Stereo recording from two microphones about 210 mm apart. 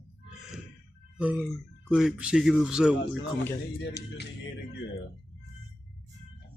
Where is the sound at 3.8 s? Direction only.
55° left (ahead or behind).